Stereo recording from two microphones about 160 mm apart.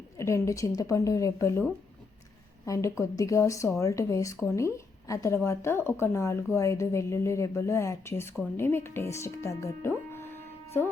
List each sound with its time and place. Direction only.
0.2 s a woman's voice: 15° left (ahead or behind)
2.6 s a woman's voice: 20° left (ahead or behind)